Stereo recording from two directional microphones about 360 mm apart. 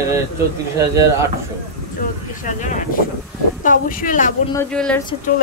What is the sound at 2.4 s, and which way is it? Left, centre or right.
Speech, left.